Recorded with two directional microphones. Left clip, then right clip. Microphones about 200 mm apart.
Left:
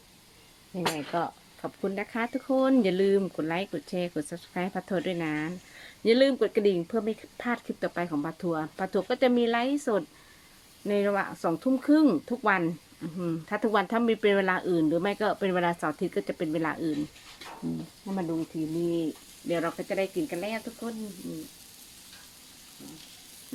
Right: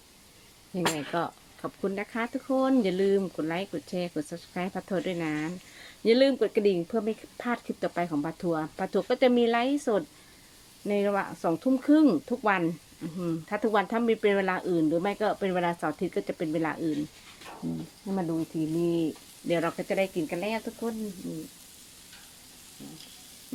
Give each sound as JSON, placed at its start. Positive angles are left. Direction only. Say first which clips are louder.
{"t": 0.9, "sound": "stir", "louder": "even", "side_deg": -15}
{"t": 1.6, "sound": "speech", "louder": "even", "side_deg": 0}
{"t": 18.0, "sound": "stir", "louder": "right 1 dB", "side_deg": -15}
{"t": 19.5, "sound": "speech", "louder": "right 2 dB", "side_deg": -30}